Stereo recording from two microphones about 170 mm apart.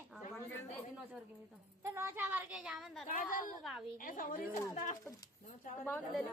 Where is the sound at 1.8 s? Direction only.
15° right (ahead or behind).